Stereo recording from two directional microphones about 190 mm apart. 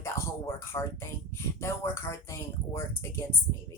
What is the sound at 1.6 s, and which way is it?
Speech, 15° left (ahead or behind).